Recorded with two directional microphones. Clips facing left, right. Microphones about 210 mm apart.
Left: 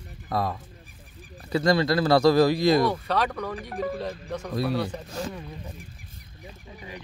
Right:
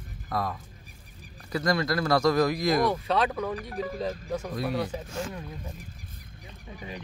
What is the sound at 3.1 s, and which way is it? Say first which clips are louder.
Speech: right 1 dB; 5° right (ahead or behind).